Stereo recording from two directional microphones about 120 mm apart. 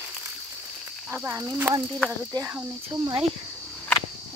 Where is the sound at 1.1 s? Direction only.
20° right (ahead or behind).